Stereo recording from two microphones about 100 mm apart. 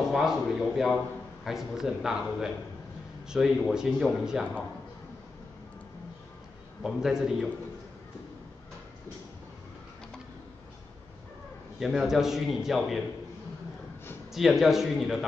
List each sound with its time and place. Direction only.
0.1 s speech: 5° right (ahead or behind)
6.8 s speech: 5° right (ahead or behind)
11.8 s speech: 5° right (ahead or behind)
14.3 s speech: 5° right (ahead or behind)